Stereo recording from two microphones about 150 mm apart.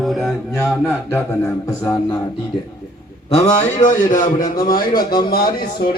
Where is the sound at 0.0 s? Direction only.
Centre (ahead or behind).